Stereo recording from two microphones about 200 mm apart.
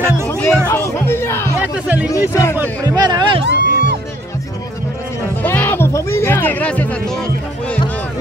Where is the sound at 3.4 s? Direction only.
60° right (ahead or behind).